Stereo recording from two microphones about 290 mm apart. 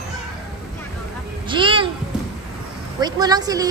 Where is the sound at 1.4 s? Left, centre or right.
Centre.